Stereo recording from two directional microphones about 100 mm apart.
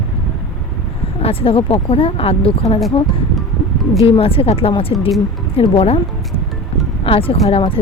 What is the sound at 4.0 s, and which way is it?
Speech, 70° left (ahead or behind).